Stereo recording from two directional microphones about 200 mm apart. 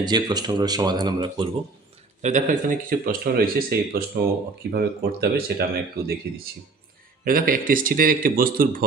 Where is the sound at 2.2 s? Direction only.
35° right (ahead or behind); by 5.6 s 50° right (ahead or behind).